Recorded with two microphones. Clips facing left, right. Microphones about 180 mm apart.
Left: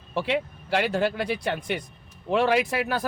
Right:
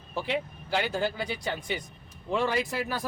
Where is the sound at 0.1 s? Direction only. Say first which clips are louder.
Left 4 dB; 70° left (ahead or behind).